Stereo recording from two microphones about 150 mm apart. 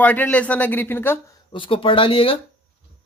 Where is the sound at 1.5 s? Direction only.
35° left (ahead or behind).